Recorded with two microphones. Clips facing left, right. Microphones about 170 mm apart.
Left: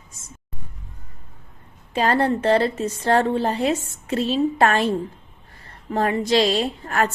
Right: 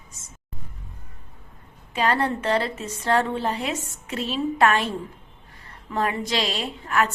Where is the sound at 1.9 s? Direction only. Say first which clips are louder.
Left 4 dB; 35° left (ahead or behind).